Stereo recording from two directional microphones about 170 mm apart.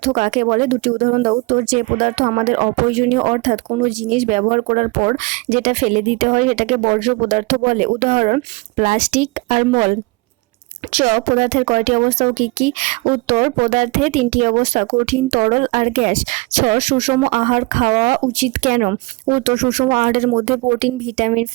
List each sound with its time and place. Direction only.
0.0 s speech: 40° right (ahead or behind)